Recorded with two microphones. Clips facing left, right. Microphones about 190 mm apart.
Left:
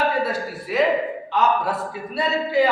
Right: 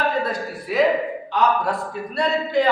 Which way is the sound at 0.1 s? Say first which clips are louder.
Even; 5° left (ahead or behind).